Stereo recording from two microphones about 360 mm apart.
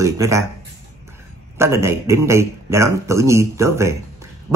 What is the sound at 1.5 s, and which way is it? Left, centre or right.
Speech, centre.